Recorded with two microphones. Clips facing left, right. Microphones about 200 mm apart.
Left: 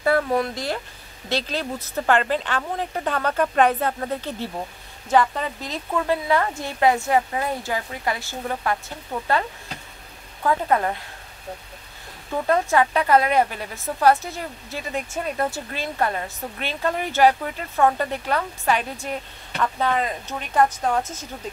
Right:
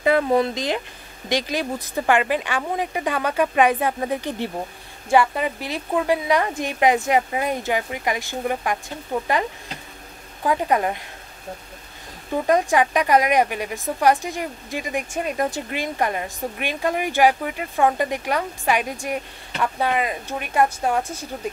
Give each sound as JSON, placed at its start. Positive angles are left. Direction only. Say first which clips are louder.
{"t": 0.0, "sound": "a woman's voice", "louder": "right 3 dB", "side_deg": -20}
{"t": 10.4, "sound": "a woman's voice", "louder": "right 1 dB", "side_deg": -15}
{"t": 12.4, "sound": "a woman's voice", "louder": "right 1 dB", "side_deg": -15}